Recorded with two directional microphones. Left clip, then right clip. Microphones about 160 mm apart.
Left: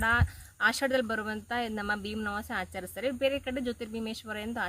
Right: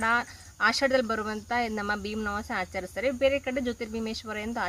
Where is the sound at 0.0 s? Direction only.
35° left (ahead or behind).